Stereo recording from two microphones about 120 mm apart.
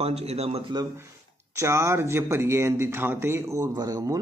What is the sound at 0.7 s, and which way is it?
Speech, 30° right (ahead or behind).